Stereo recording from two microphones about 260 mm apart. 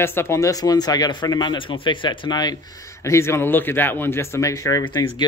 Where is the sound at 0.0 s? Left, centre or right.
Centre.